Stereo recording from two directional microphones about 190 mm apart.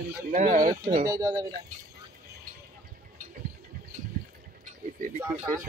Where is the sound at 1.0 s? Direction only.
20° right (ahead or behind).